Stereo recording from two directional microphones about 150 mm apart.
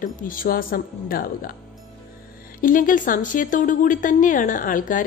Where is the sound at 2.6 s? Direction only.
65° left (ahead or behind).